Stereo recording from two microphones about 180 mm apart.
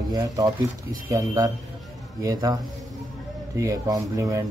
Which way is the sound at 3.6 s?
20° right (ahead or behind).